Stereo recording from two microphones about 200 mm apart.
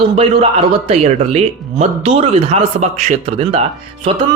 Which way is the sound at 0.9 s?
35° right (ahead or behind).